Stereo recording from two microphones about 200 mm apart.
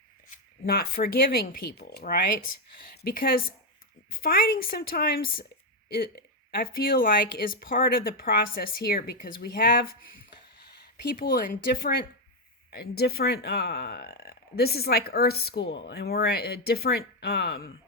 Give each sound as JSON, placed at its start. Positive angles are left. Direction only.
{"t": 0.3, "sound": "speech", "side_deg": 50}
{"t": 11.0, "sound": "speech", "side_deg": 45}